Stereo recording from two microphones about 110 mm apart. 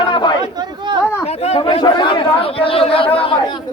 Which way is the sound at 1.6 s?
45° left (ahead or behind).